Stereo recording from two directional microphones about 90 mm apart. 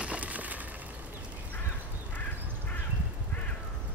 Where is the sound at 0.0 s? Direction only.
15° right (ahead or behind).